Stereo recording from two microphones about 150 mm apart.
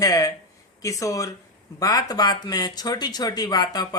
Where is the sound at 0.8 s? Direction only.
20° left (ahead or behind).